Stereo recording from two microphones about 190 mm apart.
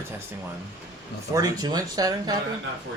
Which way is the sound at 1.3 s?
20° right (ahead or behind).